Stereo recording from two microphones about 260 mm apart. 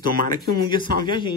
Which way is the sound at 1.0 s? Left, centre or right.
Centre.